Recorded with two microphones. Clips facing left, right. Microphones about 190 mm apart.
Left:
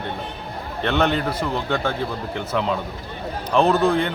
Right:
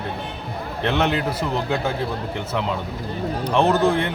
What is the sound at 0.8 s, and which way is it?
A man's voice, centre (ahead or behind).